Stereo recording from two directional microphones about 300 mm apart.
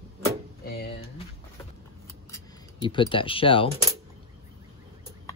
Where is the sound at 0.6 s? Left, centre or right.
Left.